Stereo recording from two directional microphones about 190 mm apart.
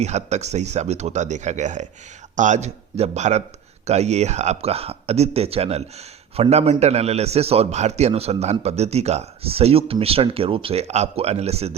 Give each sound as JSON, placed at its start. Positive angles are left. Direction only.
{"t": 0.0, "sound": "a man's voice", "side_deg": -35}